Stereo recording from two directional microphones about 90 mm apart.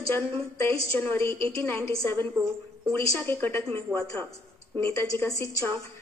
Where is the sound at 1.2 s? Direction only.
30° left (ahead or behind).